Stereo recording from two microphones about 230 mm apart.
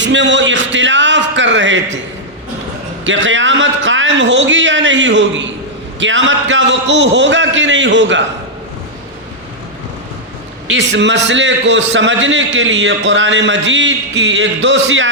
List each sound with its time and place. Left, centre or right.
0.0 s a man's voice: right
3.0 s a man's voice: right
10.7 s a man's voice: right